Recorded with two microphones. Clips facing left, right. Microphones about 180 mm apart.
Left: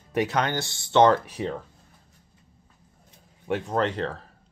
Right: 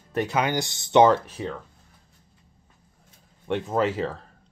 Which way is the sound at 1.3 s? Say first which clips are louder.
Left 2 dB; 15° left (ahead or behind).